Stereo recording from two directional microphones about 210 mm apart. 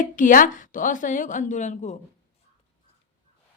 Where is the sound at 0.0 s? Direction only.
40° left (ahead or behind).